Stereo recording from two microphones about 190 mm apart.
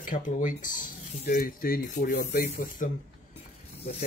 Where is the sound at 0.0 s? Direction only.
45° left (ahead or behind).